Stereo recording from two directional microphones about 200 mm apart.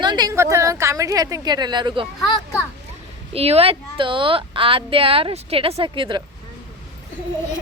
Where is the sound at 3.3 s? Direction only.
30° right (ahead or behind).